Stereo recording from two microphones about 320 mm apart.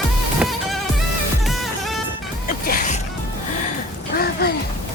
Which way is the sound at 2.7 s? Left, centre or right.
Left.